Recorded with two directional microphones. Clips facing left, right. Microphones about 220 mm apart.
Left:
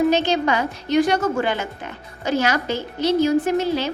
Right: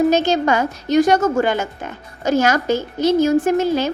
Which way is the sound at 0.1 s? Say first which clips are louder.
Right 3 dB; 45° right (ahead or behind).